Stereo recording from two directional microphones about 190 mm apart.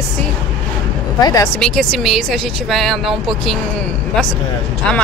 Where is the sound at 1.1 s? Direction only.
20° left (ahead or behind).